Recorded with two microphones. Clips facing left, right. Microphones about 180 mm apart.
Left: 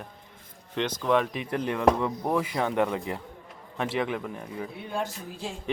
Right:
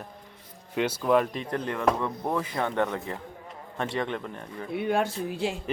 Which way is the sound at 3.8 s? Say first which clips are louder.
Left 1 dB; 5° left (ahead or behind).